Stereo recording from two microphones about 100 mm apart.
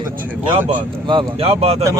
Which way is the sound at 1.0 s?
65° right (ahead or behind).